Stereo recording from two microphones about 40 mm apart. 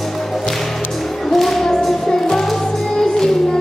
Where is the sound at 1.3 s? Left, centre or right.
Centre.